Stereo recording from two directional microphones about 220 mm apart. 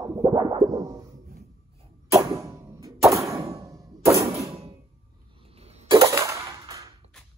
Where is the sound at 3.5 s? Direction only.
15° right (ahead or behind).